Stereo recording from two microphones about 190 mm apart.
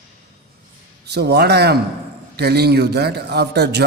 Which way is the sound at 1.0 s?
60° right (ahead or behind).